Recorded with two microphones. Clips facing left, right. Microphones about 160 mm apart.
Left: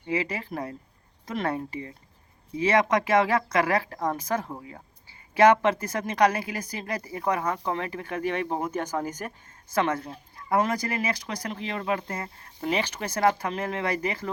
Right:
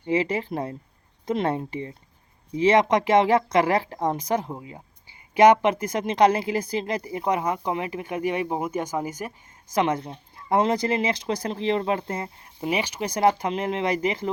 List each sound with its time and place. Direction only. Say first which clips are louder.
0.0 s speech: right 5 dB; 25° right (ahead or behind)